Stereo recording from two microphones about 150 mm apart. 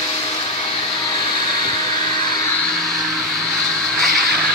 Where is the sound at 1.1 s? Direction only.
30° left (ahead or behind).